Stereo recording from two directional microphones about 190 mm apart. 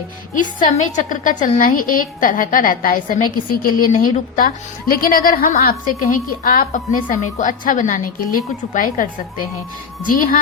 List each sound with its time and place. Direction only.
0.6 s a woman's voice: 40° left (ahead or behind)